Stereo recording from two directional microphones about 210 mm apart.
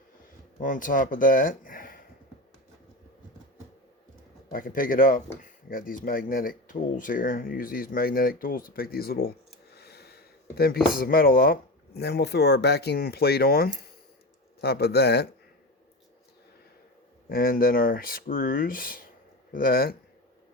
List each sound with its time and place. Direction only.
0.6 s speech: 40° left (ahead or behind)
4.5 s speech: 40° left (ahead or behind)
17.2 s speech: 45° left (ahead or behind)